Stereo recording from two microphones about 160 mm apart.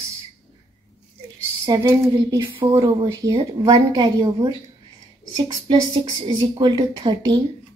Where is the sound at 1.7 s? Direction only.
20° right (ahead or behind).